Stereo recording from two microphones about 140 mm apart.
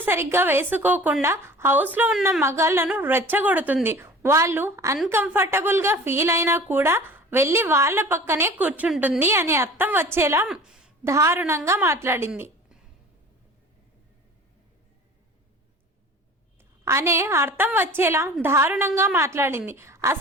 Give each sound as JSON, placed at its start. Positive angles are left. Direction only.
{"t": 0.0, "sound": "a woman's voice", "side_deg": -15}
{"t": 10.4, "sound": "a woman's voice", "side_deg": -5}
{"t": 11.0, "sound": "a woman's voice", "side_deg": -20}
{"t": 16.8, "sound": "a woman's voice", "side_deg": -20}